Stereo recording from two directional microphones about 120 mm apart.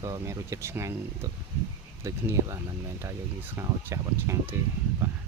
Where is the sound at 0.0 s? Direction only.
25° right (ahead or behind).